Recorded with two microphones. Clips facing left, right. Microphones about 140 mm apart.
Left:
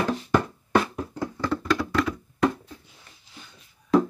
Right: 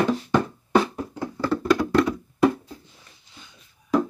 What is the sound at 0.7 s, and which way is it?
Music, 10° right (ahead or behind).